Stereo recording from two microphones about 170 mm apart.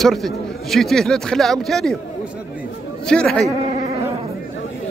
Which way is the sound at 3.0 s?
5° left (ahead or behind).